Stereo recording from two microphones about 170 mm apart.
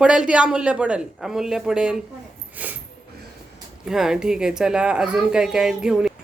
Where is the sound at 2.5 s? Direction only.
10° right (ahead or behind).